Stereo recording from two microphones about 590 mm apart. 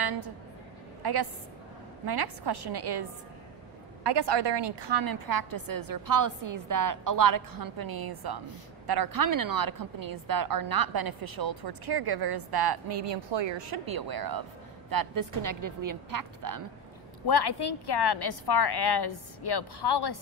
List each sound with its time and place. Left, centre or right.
0.0 s a sound: right
1.0 s a woman's voice: right
13.7 s a woman's voice: right
17.3 s a woman's voice: left